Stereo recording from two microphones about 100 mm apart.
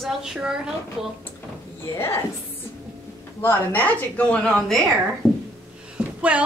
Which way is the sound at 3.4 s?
20° left (ahead or behind).